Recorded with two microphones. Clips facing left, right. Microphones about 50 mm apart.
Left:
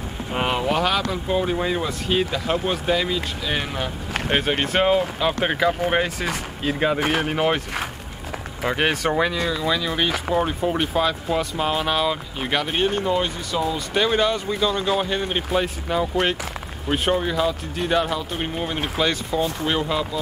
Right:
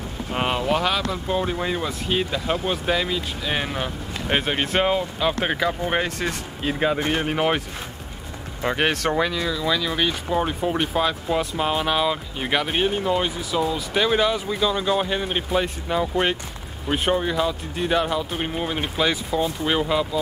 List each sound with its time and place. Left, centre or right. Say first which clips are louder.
0.3 s vehicle: left 1 dB; centre
0.6 s speech: left 1 dB; centre
7.0 s speech: left 2 dB; left
7.2 s speech: left 1 dB; centre
8.6 s speech: even; centre